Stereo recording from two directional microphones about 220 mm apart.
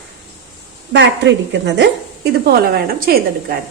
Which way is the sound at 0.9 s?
55° right (ahead or behind).